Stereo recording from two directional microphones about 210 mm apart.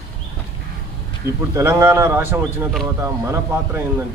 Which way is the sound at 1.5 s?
10° right (ahead or behind).